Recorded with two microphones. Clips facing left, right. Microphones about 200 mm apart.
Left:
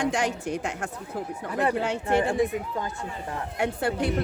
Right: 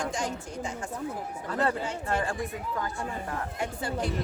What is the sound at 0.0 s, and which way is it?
Speech, 70° left (ahead or behind).